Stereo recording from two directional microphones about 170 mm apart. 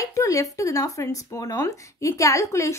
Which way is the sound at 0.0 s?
20° left (ahead or behind).